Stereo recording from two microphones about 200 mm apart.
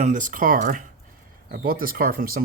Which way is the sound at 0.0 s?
40° right (ahead or behind).